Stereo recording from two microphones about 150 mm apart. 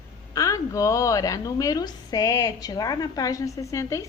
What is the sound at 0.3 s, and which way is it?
A woman's voice, 20° left (ahead or behind).